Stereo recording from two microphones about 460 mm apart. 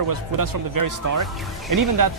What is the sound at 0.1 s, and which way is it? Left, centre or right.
Speech, right.